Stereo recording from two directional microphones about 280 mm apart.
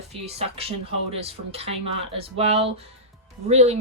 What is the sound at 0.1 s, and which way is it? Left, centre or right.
Speech, right.